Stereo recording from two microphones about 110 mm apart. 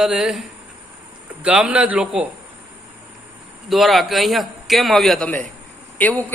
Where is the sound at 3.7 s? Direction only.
Centre (ahead or behind).